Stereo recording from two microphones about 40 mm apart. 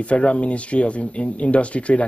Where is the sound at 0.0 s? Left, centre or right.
Left.